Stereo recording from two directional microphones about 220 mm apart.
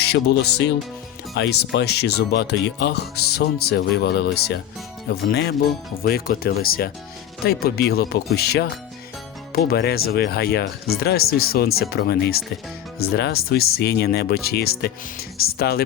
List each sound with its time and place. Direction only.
0.0 s speech: 50° left (ahead or behind)